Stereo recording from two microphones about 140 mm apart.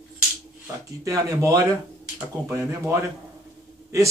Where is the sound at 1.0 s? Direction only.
25° right (ahead or behind).